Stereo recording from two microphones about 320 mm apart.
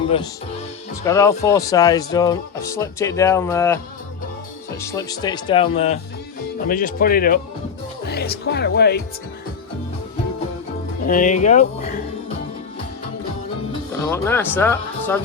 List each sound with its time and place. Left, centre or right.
1.0 s speech: centre
4.8 s speech: centre; by 9.0 s left
11.0 s speech: left
14.1 s speech: centre